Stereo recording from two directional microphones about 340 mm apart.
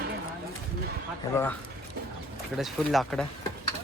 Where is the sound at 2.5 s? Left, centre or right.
Centre.